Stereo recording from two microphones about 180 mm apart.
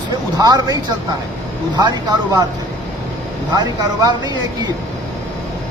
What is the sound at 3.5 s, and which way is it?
Speech, 20° right (ahead or behind).